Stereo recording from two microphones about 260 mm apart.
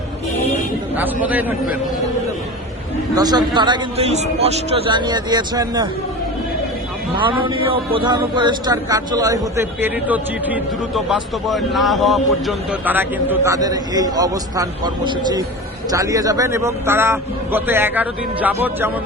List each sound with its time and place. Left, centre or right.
0.9 s a man's voice: centre
3.2 s a man's voice: centre
7.3 s a man's voice: centre